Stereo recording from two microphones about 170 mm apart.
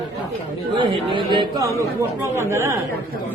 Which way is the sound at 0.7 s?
30° right (ahead or behind).